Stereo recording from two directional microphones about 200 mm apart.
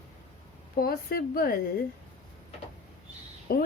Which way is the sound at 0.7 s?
50° left (ahead or behind).